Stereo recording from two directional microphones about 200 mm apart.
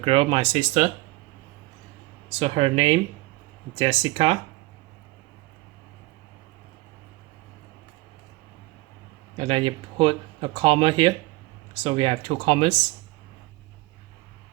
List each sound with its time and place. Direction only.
0.0 s speech: 25° right (ahead or behind)
2.4 s speech: 30° right (ahead or behind)
9.4 s speech: 25° right (ahead or behind)